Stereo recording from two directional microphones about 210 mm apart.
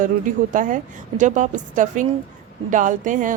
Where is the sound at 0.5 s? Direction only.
40° right (ahead or behind).